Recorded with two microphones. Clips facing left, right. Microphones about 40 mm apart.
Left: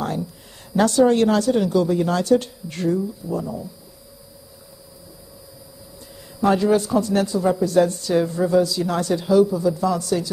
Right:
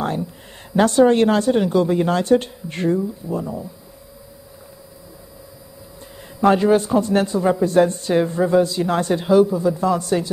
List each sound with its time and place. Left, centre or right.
0.7 s speech: right
6.4 s speech: right